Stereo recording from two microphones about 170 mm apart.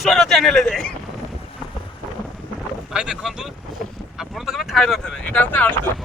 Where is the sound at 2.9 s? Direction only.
5° right (ahead or behind); by 5.9 s 10° left (ahead or behind).